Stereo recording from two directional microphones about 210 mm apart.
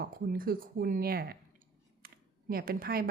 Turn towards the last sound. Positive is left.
turn(degrees=-45)  # may be behind; listen again after turning